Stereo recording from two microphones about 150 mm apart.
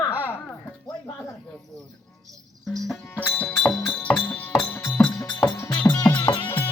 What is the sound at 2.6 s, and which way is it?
Speech, centre (ahead or behind).